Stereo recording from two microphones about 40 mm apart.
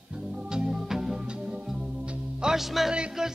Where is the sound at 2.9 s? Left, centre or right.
Right.